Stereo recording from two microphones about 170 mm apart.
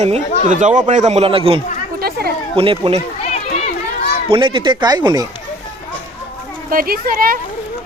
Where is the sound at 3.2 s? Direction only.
40° left (ahead or behind).